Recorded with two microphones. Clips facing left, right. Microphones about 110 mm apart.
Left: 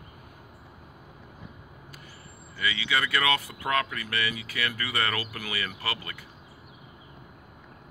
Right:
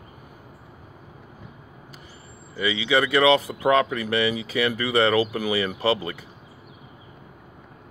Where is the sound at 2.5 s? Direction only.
20° right (ahead or behind).